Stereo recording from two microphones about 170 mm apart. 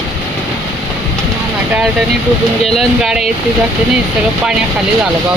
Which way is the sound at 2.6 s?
Centre (ahead or behind).